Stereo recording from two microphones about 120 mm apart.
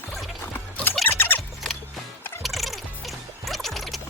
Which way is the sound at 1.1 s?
15° left (ahead or behind).